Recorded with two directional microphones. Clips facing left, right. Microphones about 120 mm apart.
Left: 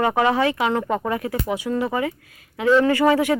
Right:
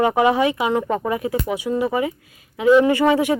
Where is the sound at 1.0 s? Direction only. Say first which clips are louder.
Right 2 dB; 20° right (ahead or behind).